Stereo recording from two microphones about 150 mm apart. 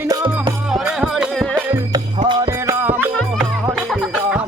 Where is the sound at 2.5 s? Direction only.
20° right (ahead or behind).